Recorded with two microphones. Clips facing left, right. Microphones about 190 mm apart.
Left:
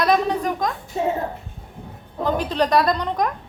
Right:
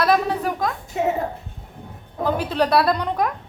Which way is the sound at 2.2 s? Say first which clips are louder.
Even; 10° right (ahead or behind).